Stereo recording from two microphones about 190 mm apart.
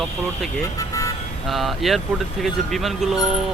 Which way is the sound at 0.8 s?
15° left (ahead or behind).